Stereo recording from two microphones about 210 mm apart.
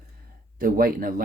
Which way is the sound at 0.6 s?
40° right (ahead or behind).